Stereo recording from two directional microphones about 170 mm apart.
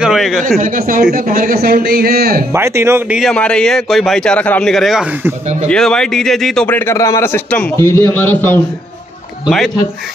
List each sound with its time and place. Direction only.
0.0 s speech: centre (ahead or behind)
0.6 s a man's voice: 55° right (ahead or behind)
2.5 s speech: 15° right (ahead or behind)
3.2 s a man's voice: 5° left (ahead or behind)
6.9 s a man's voice: 15° left (ahead or behind)